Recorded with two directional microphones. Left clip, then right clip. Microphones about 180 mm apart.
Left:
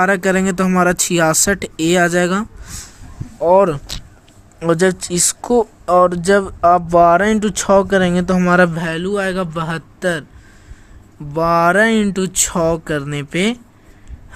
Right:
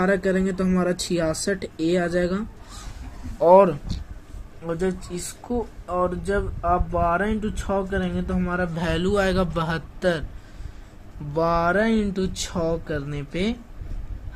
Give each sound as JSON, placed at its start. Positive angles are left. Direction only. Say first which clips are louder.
{"t": 0.0, "sound": "speech", "louder": "left 7 dB", "side_deg": 55}
{"t": 3.3, "sound": "speech", "louder": "left 2 dB", "side_deg": 5}
{"t": 4.6, "sound": "speech", "louder": "left 12 dB", "side_deg": 90}
{"t": 8.7, "sound": "a man's voice", "louder": "left 3 dB", "side_deg": 20}
{"t": 11.3, "sound": "speech", "louder": "left 8 dB", "side_deg": 30}